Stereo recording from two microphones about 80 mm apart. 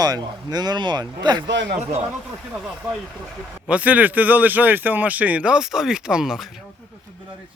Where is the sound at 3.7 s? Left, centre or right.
Centre.